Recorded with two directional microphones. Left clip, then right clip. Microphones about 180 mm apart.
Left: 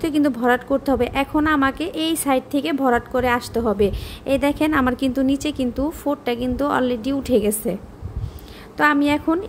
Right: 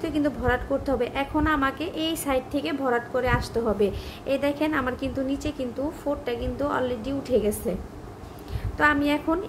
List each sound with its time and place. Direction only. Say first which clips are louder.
0.0 s a woman's voice: left 6 dB; 55° left (ahead or behind)
8.7 s a woman's voice: left 4 dB; 45° left (ahead or behind)